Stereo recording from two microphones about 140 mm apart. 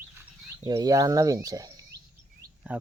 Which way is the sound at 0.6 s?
25° right (ahead or behind).